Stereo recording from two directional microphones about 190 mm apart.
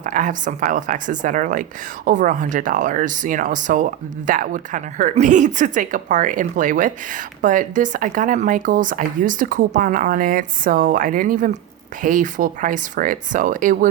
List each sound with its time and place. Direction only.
0.0 s a woman's voice: 45° right (ahead or behind)